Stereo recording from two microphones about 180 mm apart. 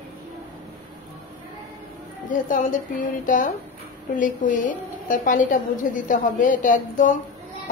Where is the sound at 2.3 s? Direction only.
45° left (ahead or behind).